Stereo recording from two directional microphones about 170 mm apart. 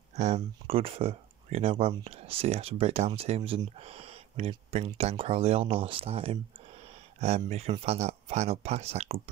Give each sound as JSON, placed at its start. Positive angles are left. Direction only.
{"t": 0.1, "sound": "speech", "side_deg": -40}